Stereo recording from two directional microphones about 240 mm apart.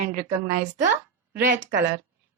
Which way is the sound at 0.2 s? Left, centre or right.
Right.